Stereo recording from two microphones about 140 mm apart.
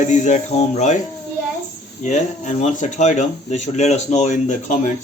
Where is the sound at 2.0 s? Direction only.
55° left (ahead or behind).